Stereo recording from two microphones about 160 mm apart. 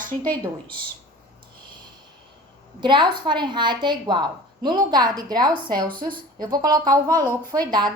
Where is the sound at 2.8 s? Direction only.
30° right (ahead or behind).